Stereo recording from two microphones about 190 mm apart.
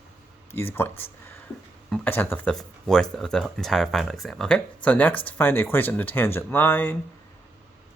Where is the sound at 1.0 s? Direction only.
10° left (ahead or behind).